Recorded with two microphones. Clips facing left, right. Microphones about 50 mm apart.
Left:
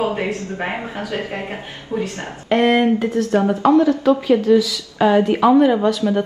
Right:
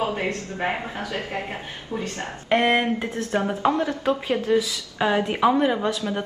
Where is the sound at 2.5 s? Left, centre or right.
Right.